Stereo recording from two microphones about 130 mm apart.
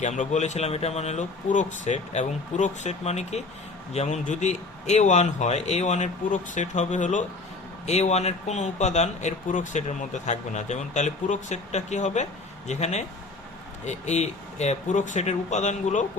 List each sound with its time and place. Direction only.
0.0 s speech: 65° left (ahead or behind)